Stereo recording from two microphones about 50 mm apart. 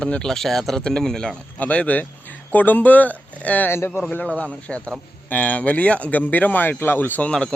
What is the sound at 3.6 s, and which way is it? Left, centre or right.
Speech, left.